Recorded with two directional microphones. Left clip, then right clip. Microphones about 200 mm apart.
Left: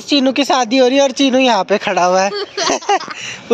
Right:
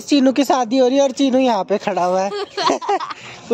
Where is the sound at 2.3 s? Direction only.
35° right (ahead or behind).